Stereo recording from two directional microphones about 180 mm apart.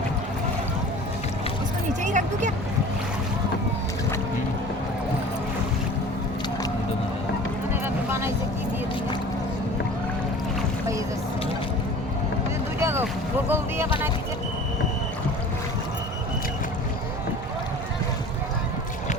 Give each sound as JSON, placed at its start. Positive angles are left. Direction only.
{"t": 1.9, "sound": "a sound", "side_deg": -45}
{"t": 12.8, "sound": "boat", "side_deg": -15}
{"t": 13.5, "sound": "music", "side_deg": -10}